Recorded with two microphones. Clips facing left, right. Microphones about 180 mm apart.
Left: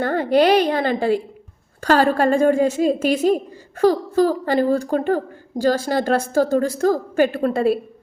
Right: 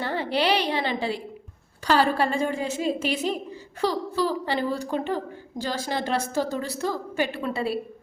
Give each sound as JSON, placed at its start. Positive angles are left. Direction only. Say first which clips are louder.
{"t": 0.0, "sound": "a woman's voice", "louder": "left 9 dB", "side_deg": 50}